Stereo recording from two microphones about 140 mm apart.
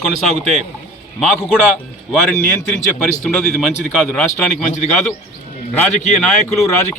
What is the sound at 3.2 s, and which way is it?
A man's voice, 5° left (ahead or behind).